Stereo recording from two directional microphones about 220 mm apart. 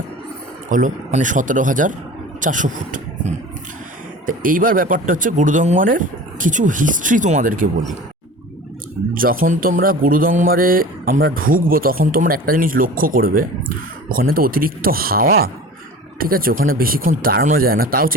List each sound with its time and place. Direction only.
0.7 s speech: 35° right (ahead or behind)
9.1 s speech: 40° right (ahead or behind)